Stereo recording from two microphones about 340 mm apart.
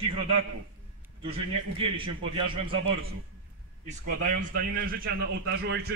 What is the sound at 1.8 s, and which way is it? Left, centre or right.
A man's voice, centre.